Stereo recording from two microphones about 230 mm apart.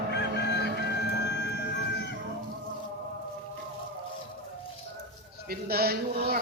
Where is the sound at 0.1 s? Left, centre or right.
Left.